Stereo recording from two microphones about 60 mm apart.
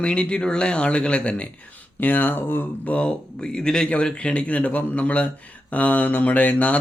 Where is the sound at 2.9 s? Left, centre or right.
Centre.